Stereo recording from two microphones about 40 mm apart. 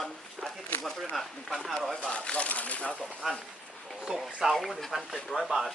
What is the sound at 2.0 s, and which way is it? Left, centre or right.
Speech, left.